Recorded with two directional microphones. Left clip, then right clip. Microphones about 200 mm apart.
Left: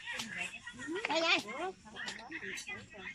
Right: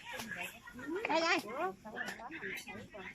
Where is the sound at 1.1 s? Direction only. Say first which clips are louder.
Left 1 dB; centre (ahead or behind).